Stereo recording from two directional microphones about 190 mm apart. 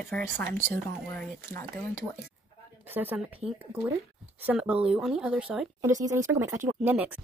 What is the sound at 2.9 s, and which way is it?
Speech, 10° right (ahead or behind).